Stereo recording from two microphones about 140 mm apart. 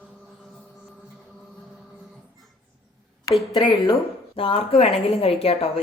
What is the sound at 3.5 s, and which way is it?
A woman's voice, 35° left (ahead or behind).